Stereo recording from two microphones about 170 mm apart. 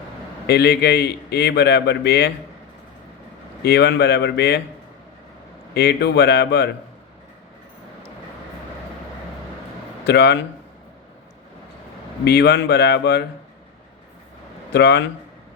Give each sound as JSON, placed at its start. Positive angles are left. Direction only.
{"t": 0.4, "sound": "a man's voice", "side_deg": 75}
{"t": 3.6, "sound": "a man's voice", "side_deg": 80}
{"t": 5.7, "sound": "speech", "side_deg": 75}
{"t": 10.1, "sound": "a man's voice", "side_deg": 80}
{"t": 12.2, "sound": "a man's voice", "side_deg": 80}
{"t": 14.7, "sound": "a man's voice", "side_deg": 90}